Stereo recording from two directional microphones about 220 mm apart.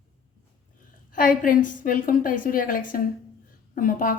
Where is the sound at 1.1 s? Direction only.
35° left (ahead or behind).